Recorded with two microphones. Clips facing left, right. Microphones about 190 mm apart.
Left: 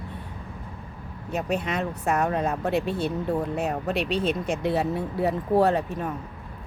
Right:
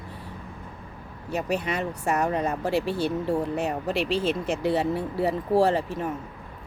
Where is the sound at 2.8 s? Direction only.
70° right (ahead or behind).